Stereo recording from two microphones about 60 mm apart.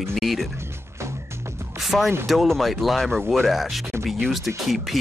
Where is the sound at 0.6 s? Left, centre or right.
Right.